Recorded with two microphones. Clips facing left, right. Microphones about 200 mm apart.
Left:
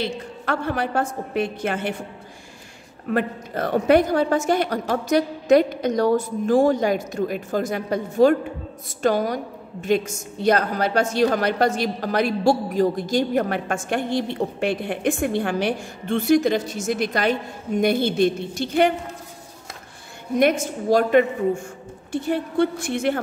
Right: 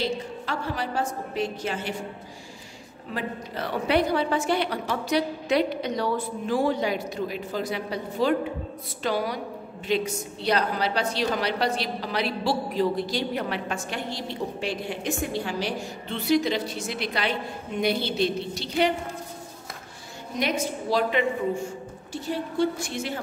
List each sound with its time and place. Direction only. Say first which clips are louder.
0.0 s a woman's voice: left 1 dB; 55° left (ahead or behind)
3.1 s a woman's voice: left 8 dB; 50° left (ahead or behind)
20.3 s a woman's voice: left 8 dB; 50° left (ahead or behind)